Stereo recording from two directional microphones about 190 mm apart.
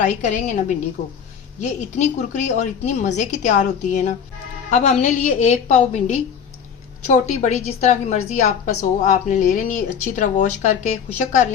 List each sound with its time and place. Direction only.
0.0 s a woman's voice: 40° left (ahead or behind)
1.6 s a woman's voice: 40° left (ahead or behind)